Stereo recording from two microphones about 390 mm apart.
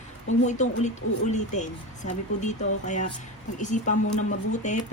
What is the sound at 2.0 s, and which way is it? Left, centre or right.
Speech, centre.